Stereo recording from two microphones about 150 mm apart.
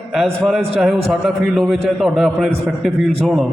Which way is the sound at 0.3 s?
15° right (ahead or behind).